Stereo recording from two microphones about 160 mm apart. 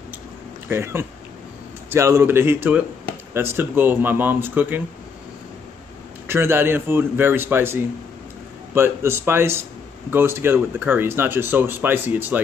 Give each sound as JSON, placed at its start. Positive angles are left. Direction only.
{"t": 0.7, "sound": "speech", "side_deg": -15}
{"t": 6.2, "sound": "speech", "side_deg": -15}